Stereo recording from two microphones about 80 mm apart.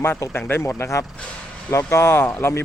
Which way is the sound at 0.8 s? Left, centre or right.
Left.